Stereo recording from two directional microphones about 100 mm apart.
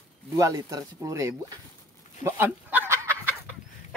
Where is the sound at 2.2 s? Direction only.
20° right (ahead or behind).